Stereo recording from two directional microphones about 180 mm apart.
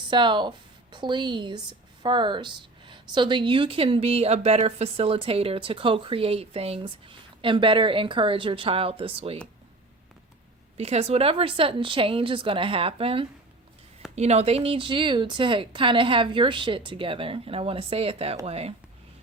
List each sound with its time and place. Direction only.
0.1 s a woman's voice: 25° right (ahead or behind)
10.8 s a woman's voice: 35° right (ahead or behind)